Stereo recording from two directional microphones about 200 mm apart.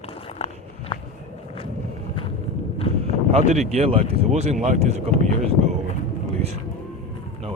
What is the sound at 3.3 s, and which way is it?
Speech, 30° right (ahead or behind).